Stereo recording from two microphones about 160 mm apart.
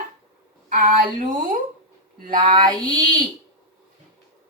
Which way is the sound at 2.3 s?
30° right (ahead or behind).